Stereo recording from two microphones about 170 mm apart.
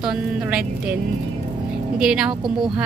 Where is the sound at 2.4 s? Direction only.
30° right (ahead or behind).